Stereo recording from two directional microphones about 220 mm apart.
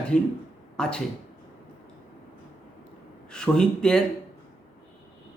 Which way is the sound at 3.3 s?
5° left (ahead or behind).